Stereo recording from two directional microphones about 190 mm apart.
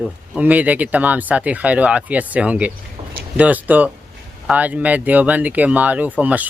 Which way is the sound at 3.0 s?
25° right (ahead or behind).